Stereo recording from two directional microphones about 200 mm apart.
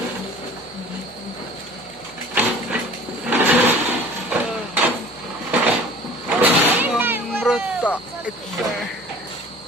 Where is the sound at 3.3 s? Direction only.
10° right (ahead or behind).